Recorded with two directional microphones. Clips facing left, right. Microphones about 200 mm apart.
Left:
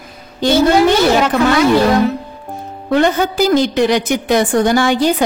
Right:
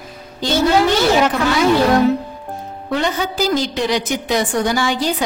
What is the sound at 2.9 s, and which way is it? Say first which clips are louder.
A woman's voice: left 6 dB; 55° left (ahead or behind).